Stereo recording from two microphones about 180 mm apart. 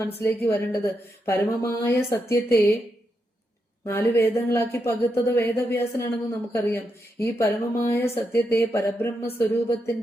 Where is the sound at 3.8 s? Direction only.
10° left (ahead or behind).